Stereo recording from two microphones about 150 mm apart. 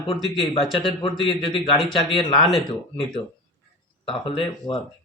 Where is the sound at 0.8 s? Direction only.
35° left (ahead or behind).